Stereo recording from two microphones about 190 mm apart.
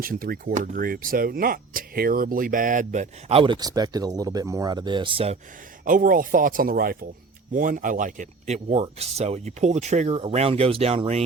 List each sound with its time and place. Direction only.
0.0 s speech: 50° right (ahead or behind); by 5.4 s 30° right (ahead or behind)
5.8 s speech: 45° right (ahead or behind)